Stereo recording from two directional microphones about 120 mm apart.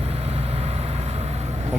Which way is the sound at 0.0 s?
60° right (ahead or behind).